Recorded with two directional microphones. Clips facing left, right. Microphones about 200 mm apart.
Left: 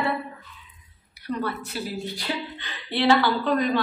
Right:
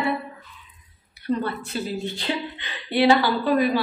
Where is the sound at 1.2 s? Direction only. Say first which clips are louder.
Right 3 dB; 25° right (ahead or behind).